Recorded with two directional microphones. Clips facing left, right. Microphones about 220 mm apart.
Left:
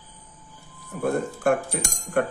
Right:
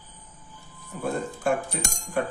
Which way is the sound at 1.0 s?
60° left (ahead or behind).